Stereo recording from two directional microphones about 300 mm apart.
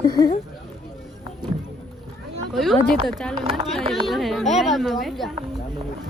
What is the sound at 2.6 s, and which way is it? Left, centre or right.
Speech, centre.